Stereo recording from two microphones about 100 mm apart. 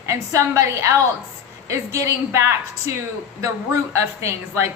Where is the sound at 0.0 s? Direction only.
30° right (ahead or behind).